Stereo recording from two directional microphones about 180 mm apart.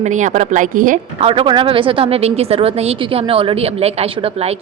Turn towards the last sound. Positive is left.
turn(degrees=-35)  # may be behind; listen again after turning